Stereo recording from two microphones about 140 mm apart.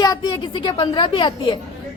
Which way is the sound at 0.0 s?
30° left (ahead or behind).